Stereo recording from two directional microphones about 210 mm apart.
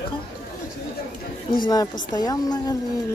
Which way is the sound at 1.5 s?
20° left (ahead or behind).